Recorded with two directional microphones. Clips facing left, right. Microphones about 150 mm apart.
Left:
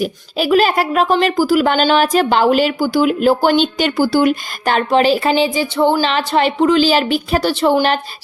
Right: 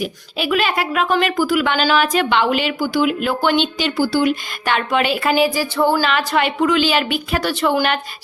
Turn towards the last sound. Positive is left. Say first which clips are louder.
# left 4 dB
turn(degrees=35)  # may be behind; listen again after turning